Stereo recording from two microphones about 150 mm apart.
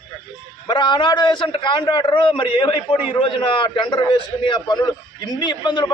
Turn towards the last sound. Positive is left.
turn(degrees=30)  # may be behind; listen again after turning